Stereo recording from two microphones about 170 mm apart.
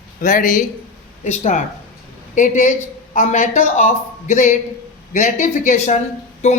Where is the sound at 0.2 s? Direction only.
50° left (ahead or behind).